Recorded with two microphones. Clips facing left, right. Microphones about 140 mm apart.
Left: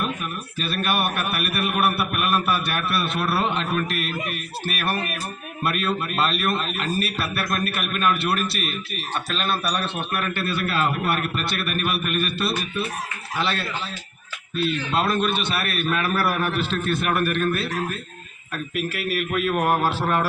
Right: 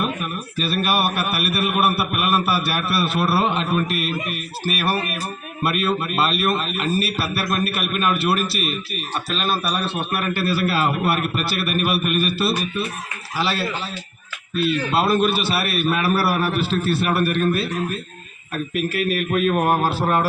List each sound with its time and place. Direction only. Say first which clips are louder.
0.6 s a man's voice: right 3 dB; 5° right (ahead or behind)
14.9 s a man's voice: right 4 dB; 5° right (ahead or behind)
16.8 s a man's voice: right 1 dB; 30° right (ahead or behind)
18.5 s a man's voice: right 4 dB; 40° right (ahead or behind)